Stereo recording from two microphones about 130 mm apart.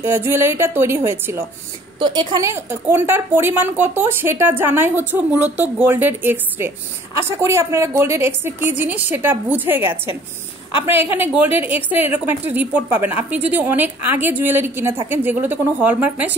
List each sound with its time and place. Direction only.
0.0 s a woman's voice: 20° right (ahead or behind)
2.0 s a woman's voice: 35° right (ahead or behind); by 16.3 s 15° right (ahead or behind)